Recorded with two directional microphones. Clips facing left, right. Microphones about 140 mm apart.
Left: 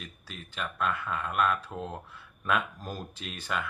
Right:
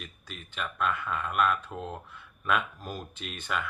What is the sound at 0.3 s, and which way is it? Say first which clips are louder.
Speech: even; 35° left (ahead or behind).